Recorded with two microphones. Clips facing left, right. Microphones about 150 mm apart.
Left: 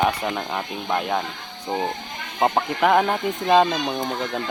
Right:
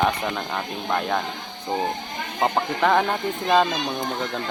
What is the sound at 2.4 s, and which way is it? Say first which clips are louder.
Speech: left 2 dB; 10° left (ahead or behind).